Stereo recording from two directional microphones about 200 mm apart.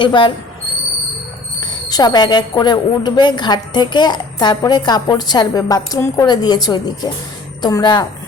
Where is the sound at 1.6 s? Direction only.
20° left (ahead or behind).